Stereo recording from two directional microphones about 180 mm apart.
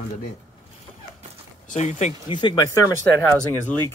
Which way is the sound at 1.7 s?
40° left (ahead or behind).